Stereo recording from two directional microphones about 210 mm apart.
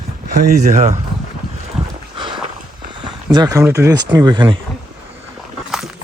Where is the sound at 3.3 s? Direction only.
20° right (ahead or behind).